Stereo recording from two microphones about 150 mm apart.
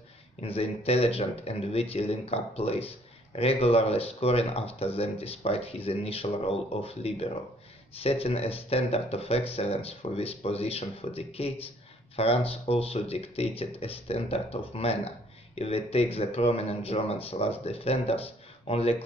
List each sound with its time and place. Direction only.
0.6 s speech: 40° left (ahead or behind)